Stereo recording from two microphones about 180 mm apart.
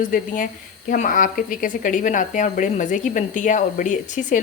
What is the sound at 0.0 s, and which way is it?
A woman's voice, 45° left (ahead or behind).